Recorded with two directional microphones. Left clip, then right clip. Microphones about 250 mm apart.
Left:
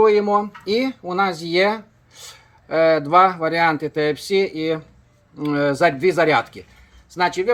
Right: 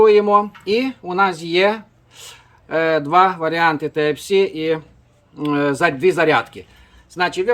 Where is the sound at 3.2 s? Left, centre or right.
Centre.